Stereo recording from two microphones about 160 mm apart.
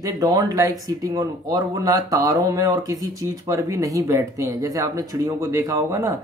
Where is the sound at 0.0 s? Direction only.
25° right (ahead or behind).